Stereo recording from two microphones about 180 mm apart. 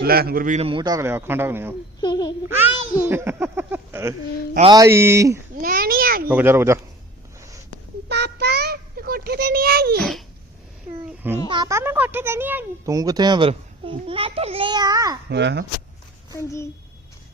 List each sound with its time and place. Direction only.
0.0 s a man's voice: 60° right (ahead or behind)
0.6 s speech: 25° right (ahead or behind)
2.0 s babbling: 25° left (ahead or behind)
3.0 s speech: 10° right (ahead or behind)
5.5 s babbling: 50° right (ahead or behind)
6.2 s speech: 10° right (ahead or behind)
8.1 s a sound: 65° right (ahead or behind)
10.0 s dog: centre (ahead or behind)
11.4 s speech: 25° right (ahead or behind)
15.3 s speech: 70° right (ahead or behind)
16.3 s a child's voice: 15° left (ahead or behind)